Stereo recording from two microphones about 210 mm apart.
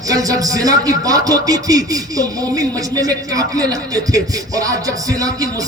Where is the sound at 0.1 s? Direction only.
15° right (ahead or behind).